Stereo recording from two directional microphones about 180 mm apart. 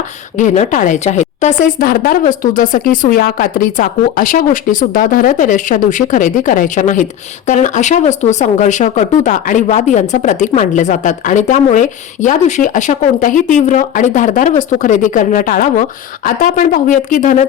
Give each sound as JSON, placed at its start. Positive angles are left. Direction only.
{"t": 0.3, "sound": "speech", "side_deg": 40}